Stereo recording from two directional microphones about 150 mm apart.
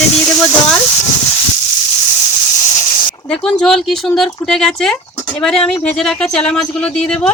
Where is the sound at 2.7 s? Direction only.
50° left (ahead or behind).